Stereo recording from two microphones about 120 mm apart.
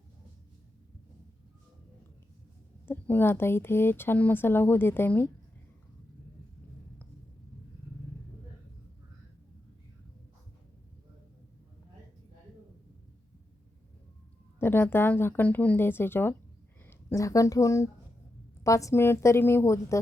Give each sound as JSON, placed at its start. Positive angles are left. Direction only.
{"t": 2.8, "sound": "speech", "side_deg": 15}
{"t": 14.6, "sound": "a woman's voice", "side_deg": 20}